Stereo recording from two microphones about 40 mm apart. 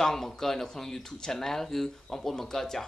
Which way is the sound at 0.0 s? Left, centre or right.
Centre.